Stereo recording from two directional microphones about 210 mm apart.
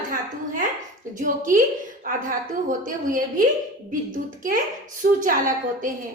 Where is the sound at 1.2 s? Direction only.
40° right (ahead or behind).